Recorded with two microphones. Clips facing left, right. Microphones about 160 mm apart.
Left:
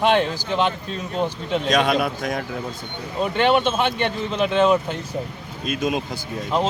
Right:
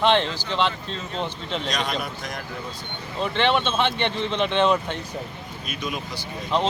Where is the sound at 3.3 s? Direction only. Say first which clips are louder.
Left 3 dB; 10° left (ahead or behind).